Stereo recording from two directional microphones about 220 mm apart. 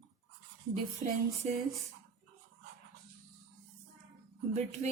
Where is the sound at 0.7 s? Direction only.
30° right (ahead or behind).